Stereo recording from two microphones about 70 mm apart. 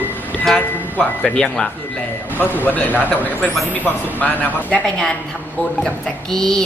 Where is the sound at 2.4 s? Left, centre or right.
Left.